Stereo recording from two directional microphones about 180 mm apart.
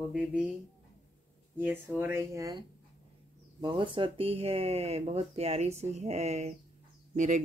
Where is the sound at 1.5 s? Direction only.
10° right (ahead or behind).